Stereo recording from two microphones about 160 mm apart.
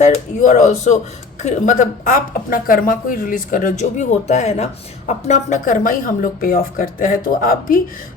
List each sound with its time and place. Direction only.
0.0 s a woman's voice: 50° left (ahead or behind)